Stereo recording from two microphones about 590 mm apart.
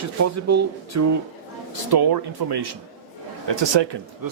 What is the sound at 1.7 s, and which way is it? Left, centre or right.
A man's voice, right.